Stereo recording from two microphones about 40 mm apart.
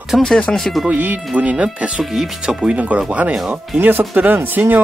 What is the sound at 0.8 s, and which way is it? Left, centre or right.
Speech, right.